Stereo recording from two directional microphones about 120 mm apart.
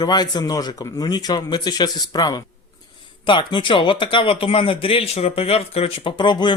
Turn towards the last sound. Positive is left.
turn(degrees=40)  # may be behind; listen again after turning